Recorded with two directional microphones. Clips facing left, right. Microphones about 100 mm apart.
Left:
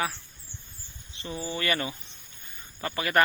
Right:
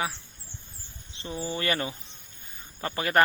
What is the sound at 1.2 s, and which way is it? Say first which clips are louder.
A man's voice: right 1 dB; 30° right (ahead or behind).